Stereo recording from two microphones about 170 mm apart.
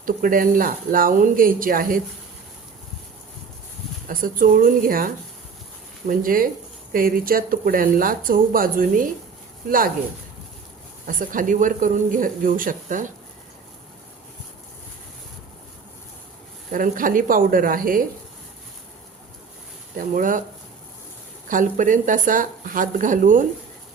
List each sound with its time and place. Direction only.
0.0 s speech: 55° right (ahead or behind)
4.1 s speech: 55° right (ahead or behind)
11.0 s speech: 55° right (ahead or behind)
16.7 s speech: 55° right (ahead or behind)
20.0 s speech: 50° right (ahead or behind)
21.5 s speech: 50° right (ahead or behind)